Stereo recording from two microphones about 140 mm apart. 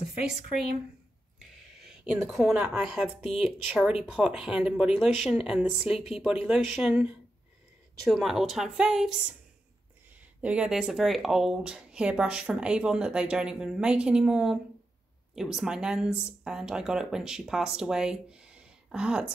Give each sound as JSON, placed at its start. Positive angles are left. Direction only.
{"t": 2.2, "sound": "speech", "side_deg": -5}
{"t": 10.4, "sound": "speech", "side_deg": -10}